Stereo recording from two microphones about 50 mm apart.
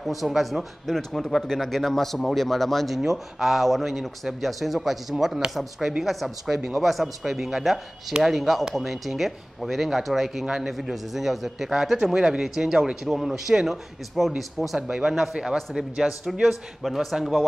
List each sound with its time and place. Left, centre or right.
0.0 s a man's voice: centre
5.1 s a man's voice: centre
14.8 s a man's voice: centre